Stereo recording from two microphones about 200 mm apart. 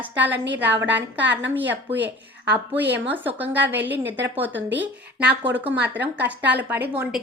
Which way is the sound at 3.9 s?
60° right (ahead or behind).